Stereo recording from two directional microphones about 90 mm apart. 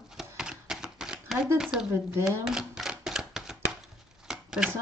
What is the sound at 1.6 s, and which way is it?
Speech, 5° right (ahead or behind).